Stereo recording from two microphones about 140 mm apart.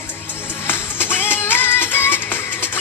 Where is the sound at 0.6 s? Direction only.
15° left (ahead or behind).